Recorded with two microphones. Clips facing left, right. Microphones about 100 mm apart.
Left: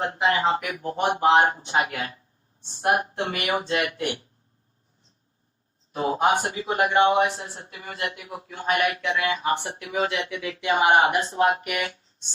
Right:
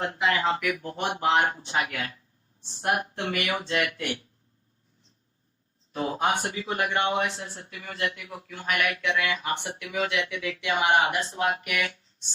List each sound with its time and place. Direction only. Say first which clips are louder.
0.0 s speech: left 3 dB; 35° left (ahead or behind)
5.9 s speech: left 4 dB; 30° left (ahead or behind)